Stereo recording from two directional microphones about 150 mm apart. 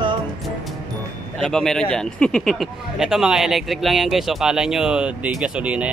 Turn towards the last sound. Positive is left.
turn(degrees=-10)  # may be behind; listen again after turning